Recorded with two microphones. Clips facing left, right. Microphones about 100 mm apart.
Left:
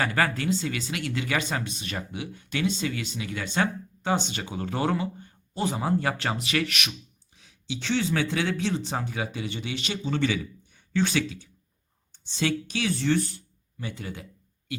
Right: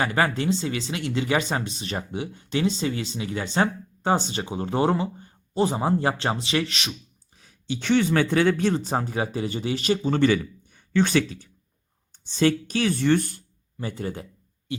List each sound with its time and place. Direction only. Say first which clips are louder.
0.0 s speech: right 3 dB; 25° right (ahead or behind)
7.3 s speech: right 4 dB; 45° right (ahead or behind)